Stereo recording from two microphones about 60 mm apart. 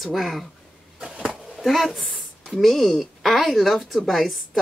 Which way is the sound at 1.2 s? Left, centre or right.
Centre.